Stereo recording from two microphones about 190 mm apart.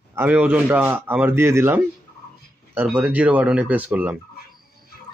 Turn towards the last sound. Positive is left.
turn(degrees=-10)  # may be behind; listen again after turning